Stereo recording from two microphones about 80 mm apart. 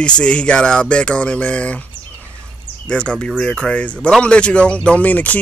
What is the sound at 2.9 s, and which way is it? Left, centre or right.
Speech, centre.